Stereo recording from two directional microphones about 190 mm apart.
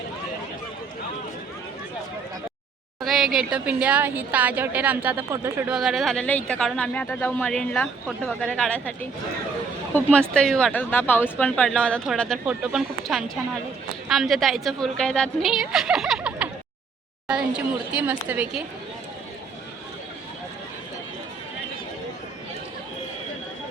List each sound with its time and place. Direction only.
3.0 s a woman's voice: centre (ahead or behind)
17.9 s a woman's voice: 10° right (ahead or behind)